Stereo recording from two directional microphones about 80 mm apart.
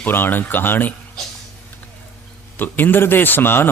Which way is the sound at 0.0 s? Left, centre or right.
Left.